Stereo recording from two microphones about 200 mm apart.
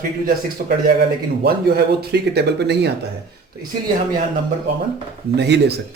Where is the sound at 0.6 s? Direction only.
50° right (ahead or behind).